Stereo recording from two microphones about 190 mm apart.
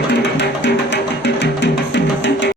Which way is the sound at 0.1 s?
65° left (ahead or behind).